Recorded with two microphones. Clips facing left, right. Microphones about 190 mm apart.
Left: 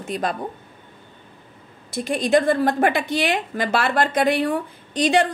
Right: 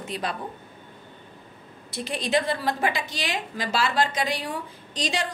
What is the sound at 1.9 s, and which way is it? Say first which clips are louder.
A woman's voice: left 7 dB; 50° left (ahead or behind).